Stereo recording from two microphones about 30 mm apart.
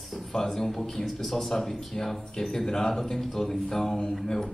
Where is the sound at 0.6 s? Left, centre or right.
Centre.